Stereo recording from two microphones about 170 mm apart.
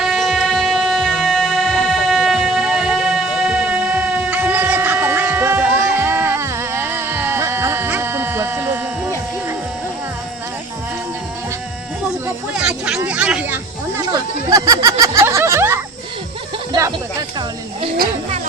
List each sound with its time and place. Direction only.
0.0 s music: centre (ahead or behind)
12.5 s hubbub: 5° right (ahead or behind)
13.0 s snake: 10° right (ahead or behind)
14.0 s a sound: 20° right (ahead or behind)